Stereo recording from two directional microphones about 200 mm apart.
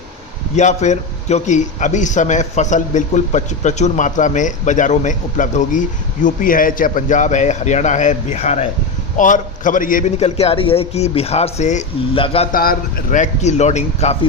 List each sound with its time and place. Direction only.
0.5 s a man's voice: 35° left (ahead or behind)
12.5 s a man's voice: 45° left (ahead or behind)